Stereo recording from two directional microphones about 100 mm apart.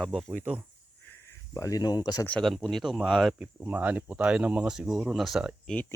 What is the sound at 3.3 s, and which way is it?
Speech, 15° right (ahead or behind).